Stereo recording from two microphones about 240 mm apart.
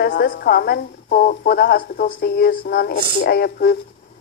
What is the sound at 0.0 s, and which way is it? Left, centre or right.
Speech, left.